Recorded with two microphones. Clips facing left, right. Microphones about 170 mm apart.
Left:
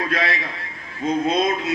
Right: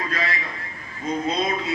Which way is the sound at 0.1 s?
70° left (ahead or behind).